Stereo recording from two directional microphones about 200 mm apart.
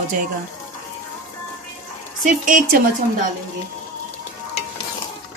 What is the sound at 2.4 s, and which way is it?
Speech, 40° right (ahead or behind).